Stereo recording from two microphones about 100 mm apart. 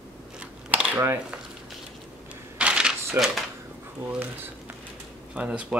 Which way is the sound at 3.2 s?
20° right (ahead or behind).